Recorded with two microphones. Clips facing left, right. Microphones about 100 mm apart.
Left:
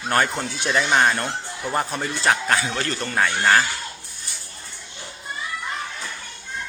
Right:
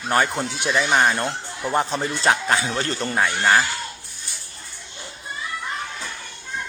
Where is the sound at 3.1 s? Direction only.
5° right (ahead or behind).